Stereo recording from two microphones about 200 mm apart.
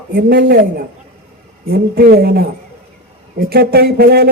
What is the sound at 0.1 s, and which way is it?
Speech, 50° right (ahead or behind).